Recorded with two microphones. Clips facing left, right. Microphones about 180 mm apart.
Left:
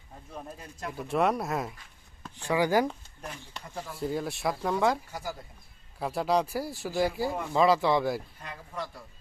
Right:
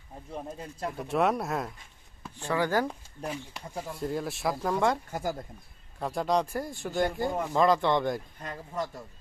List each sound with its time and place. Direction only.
0.3 s speech: 20° right (ahead or behind)
0.9 s speech: centre (ahead or behind)
2.5 s speech: 10° left (ahead or behind)
3.9 s speech: centre (ahead or behind)
5.1 s speech: 50° right (ahead or behind)
6.0 s speech: 5° left (ahead or behind)
8.4 s speech: 40° right (ahead or behind)